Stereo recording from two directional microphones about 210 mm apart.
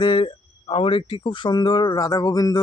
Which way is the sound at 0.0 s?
25° left (ahead or behind).